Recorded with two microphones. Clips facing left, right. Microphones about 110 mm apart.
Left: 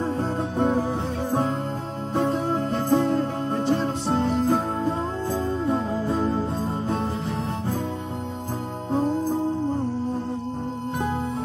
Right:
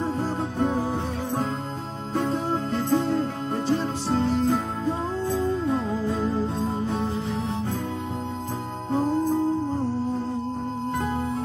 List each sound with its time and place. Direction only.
0.2 s music: 25° left (ahead or behind)